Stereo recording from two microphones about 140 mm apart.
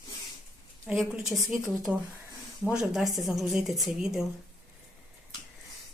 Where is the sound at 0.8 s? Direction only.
5° right (ahead or behind).